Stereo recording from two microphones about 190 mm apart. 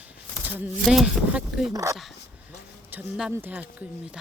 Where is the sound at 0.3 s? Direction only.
10° right (ahead or behind).